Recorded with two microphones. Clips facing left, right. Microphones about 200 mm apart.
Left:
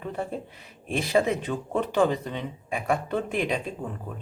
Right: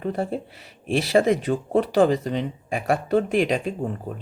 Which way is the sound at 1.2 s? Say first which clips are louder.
Right 6 dB; 35° right (ahead or behind).